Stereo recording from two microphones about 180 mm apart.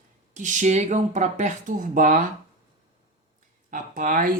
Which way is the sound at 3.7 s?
45° right (ahead or behind).